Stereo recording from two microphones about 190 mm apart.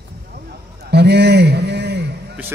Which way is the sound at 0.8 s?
60° right (ahead or behind).